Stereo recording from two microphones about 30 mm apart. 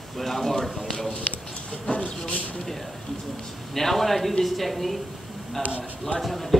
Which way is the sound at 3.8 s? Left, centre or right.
Centre.